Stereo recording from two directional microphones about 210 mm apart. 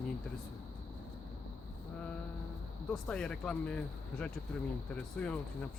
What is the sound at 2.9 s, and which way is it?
Speech, 5° left (ahead or behind).